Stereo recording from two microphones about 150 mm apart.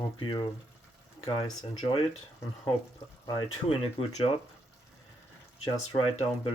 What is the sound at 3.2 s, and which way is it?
Speech, 30° left (ahead or behind).